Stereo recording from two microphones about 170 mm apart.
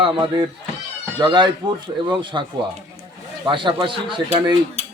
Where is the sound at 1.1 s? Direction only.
25° right (ahead or behind).